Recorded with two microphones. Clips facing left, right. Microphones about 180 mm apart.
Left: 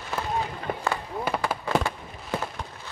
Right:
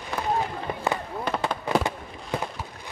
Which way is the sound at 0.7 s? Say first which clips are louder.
Left 1 dB; 55° left (ahead or behind).